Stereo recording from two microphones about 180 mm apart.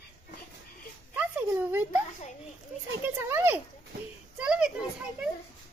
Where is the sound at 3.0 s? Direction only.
10° right (ahead or behind).